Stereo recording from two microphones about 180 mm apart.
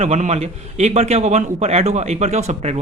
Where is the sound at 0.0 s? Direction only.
40° right (ahead or behind).